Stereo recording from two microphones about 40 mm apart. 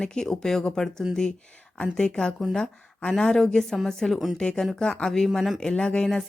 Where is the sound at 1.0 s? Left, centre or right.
Right.